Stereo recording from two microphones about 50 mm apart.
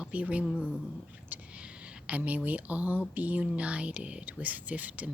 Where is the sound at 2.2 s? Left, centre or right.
Right.